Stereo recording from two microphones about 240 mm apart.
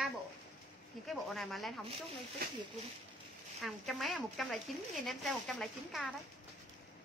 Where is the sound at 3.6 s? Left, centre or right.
Centre.